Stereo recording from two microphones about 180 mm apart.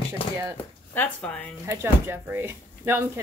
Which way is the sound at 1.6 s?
15° right (ahead or behind).